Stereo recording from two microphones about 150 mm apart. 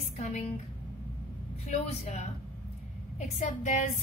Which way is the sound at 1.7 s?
45° left (ahead or behind).